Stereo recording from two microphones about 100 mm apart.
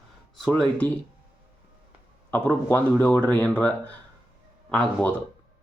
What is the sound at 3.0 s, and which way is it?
Speech, 15° left (ahead or behind).